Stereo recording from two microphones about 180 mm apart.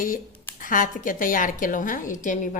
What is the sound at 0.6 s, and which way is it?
A woman's voice, 50° left (ahead or behind).